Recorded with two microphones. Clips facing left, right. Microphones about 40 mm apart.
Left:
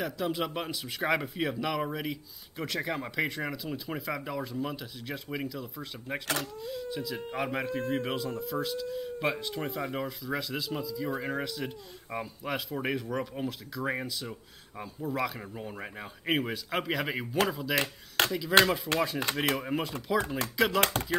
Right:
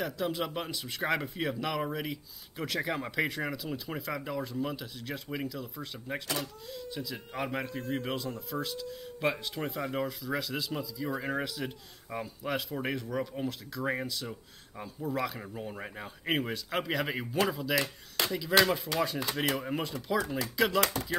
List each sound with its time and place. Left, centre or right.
0.0 s speech: centre
17.7 s speech: left
18.5 s speech: centre
20.8 s speech: left